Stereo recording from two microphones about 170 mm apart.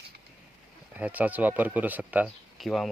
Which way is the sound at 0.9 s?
10° right (ahead or behind).